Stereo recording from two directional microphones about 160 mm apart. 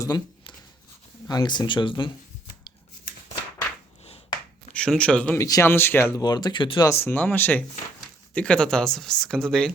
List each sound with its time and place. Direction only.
0.0 s writing: 25° left (ahead or behind)
1.3 s speech: 25° left (ahead or behind)
4.7 s speech: 5° left (ahead or behind)
5.4 s speech: 20° left (ahead or behind)
6.2 s speech: 25° left (ahead or behind); by 9.7 s 5° left (ahead or behind)